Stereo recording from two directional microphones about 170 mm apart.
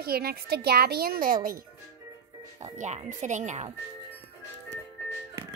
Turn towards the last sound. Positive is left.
turn(degrees=-40)  # may be behind; listen again after turning